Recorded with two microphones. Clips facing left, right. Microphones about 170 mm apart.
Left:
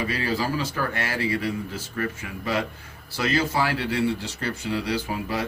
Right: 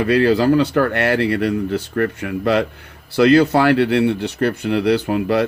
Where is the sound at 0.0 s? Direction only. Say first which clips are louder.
Right 12 dB; 65° right (ahead or behind).